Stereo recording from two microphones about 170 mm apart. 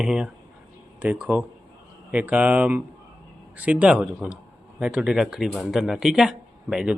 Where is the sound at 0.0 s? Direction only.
5° right (ahead or behind).